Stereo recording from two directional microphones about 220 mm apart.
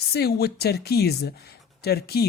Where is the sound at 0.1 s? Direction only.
45° left (ahead or behind).